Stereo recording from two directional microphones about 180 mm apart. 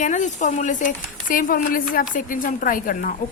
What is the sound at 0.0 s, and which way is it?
Speech, 45° left (ahead or behind).